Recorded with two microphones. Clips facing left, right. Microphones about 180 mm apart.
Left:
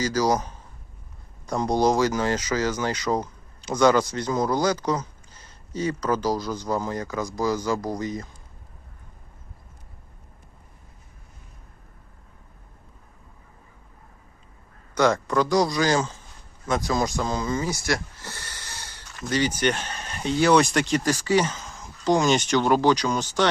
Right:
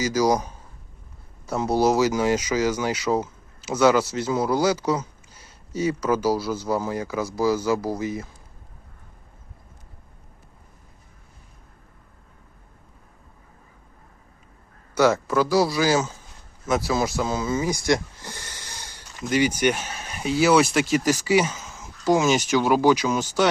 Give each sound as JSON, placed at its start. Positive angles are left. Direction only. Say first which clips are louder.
{"t": 0.0, "sound": "speech", "louder": "right 2 dB", "side_deg": -10}
{"t": 14.9, "sound": "speech", "louder": "right 2 dB", "side_deg": -5}